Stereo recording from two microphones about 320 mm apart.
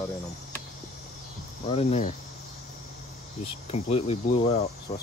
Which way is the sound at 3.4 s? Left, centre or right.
Centre.